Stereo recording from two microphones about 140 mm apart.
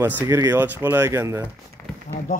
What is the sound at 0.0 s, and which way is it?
A man's voice, 20° right (ahead or behind).